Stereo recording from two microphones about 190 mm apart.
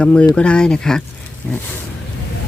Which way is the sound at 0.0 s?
5° left (ahead or behind).